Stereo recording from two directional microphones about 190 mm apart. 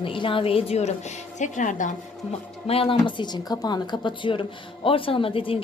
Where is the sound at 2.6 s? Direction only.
30° left (ahead or behind).